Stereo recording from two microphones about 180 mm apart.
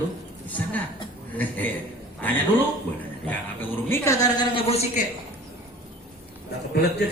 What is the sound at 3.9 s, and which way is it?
A woman's voice, 20° left (ahead or behind).